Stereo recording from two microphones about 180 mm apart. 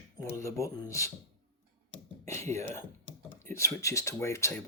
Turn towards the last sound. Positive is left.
turn(degrees=15)  # may be behind; listen again after turning